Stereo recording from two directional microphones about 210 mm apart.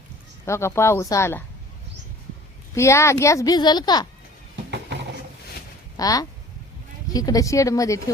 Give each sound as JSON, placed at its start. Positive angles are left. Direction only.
{"t": 0.4, "sound": "speech", "side_deg": 10}
{"t": 2.7, "sound": "speech", "side_deg": 15}
{"t": 6.0, "sound": "speech", "side_deg": 15}